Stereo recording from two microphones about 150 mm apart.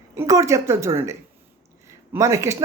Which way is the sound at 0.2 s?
20° right (ahead or behind).